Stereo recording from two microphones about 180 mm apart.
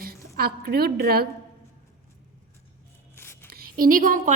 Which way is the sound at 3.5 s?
55° right (ahead or behind).